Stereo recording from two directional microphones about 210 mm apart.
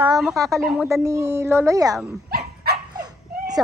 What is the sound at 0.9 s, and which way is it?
Speech, 15° right (ahead or behind).